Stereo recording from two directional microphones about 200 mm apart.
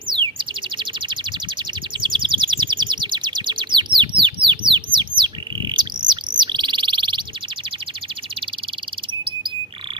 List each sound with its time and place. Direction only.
0.1 s bird: 25° right (ahead or behind)